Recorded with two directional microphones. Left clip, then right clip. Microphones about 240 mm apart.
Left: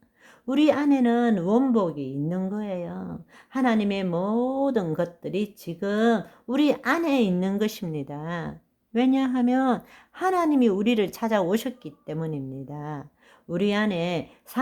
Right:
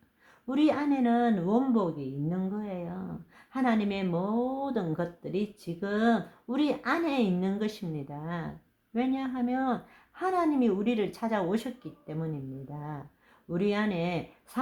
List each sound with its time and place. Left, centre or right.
0.4 s speech: left